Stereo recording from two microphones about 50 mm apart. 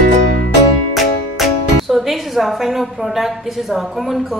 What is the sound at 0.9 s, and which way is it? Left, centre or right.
A woman's voice, centre.